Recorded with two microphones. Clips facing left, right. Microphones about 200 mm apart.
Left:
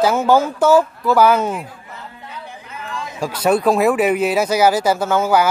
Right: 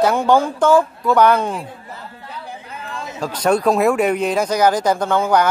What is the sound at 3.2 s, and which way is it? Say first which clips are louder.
Speech: left 1 dB; 10° left (ahead or behind).